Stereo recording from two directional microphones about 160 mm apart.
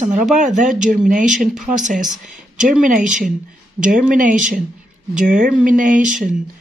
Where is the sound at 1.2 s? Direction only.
55° right (ahead or behind).